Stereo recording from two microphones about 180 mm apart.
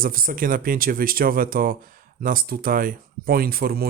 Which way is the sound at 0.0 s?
50° right (ahead or behind).